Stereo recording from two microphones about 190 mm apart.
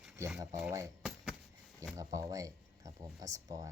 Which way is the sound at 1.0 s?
Centre (ahead or behind).